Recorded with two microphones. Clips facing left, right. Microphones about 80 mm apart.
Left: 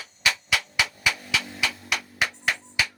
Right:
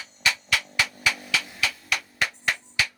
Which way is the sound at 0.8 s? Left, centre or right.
Centre.